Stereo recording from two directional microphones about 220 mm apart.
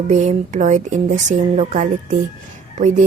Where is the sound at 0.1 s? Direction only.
35° right (ahead or behind).